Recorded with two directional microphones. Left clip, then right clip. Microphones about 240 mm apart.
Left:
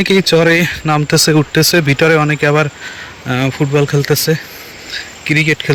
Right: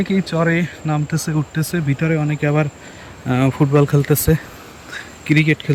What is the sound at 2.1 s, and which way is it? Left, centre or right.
Speech, centre.